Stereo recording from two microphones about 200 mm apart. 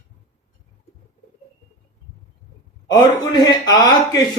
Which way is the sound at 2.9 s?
20° left (ahead or behind).